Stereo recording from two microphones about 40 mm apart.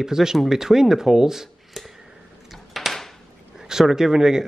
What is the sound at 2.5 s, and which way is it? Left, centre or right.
Door, centre.